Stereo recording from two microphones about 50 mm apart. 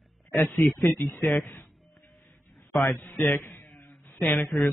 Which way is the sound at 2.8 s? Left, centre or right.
Left.